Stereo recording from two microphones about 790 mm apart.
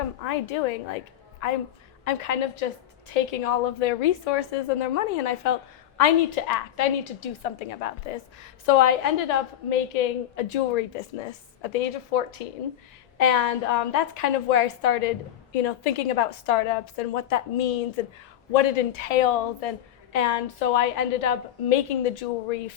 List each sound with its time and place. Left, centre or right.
0.2 s a woman's voice: left
18.5 s a woman's voice: left